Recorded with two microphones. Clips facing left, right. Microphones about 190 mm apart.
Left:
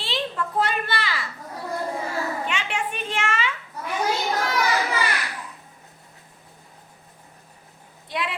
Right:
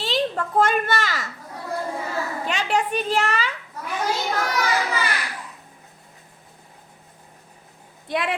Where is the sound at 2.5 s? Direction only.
40° right (ahead or behind).